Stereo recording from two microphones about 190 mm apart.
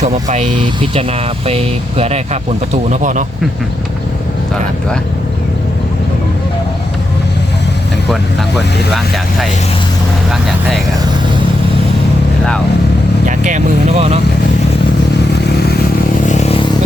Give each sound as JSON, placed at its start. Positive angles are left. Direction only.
{"t": 0.0, "sound": "speech", "side_deg": -40}
{"t": 8.1, "sound": "speech", "side_deg": 0}
{"t": 13.2, "sound": "speech", "side_deg": -40}
{"t": 16.2, "sound": "a sound", "side_deg": 35}